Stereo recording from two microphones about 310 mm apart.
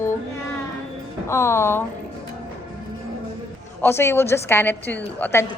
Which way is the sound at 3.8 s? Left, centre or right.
Centre.